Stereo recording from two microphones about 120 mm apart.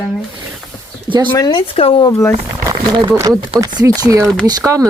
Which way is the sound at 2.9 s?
40° right (ahead or behind).